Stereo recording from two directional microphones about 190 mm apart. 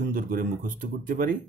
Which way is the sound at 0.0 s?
50° right (ahead or behind).